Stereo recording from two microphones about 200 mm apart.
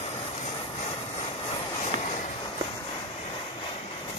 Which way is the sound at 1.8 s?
35° left (ahead or behind).